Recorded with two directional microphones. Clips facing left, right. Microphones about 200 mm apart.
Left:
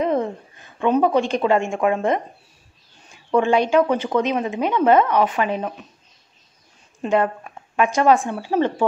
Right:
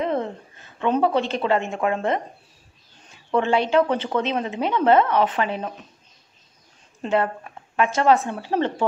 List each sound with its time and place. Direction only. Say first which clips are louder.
0.0 s a woman's voice: left 3 dB; 15° left (ahead or behind)
3.3 s speech: left 3 dB; 15° left (ahead or behind)
7.0 s speech: left 3 dB; 15° left (ahead or behind)